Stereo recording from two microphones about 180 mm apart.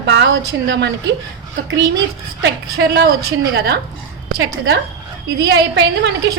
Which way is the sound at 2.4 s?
65° right (ahead or behind).